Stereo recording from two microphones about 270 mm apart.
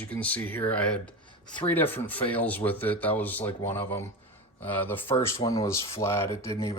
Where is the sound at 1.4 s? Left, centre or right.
Centre.